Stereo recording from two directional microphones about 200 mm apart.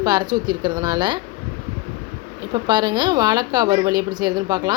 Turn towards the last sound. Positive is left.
turn(degrees=-20)  # may be behind; listen again after turning